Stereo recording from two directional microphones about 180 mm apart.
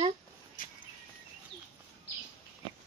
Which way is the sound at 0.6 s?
50° left (ahead or behind).